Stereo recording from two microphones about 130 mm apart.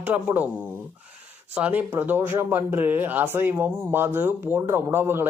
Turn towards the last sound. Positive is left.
turn(degrees=-20)  # may be behind; listen again after turning